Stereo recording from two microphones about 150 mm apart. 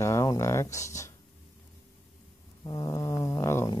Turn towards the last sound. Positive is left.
turn(degrees=20)  # may be behind; listen again after turning